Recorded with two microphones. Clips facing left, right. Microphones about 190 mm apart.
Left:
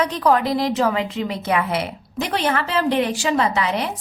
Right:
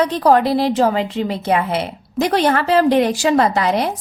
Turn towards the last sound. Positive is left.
turn(degrees=-40)  # may be behind; listen again after turning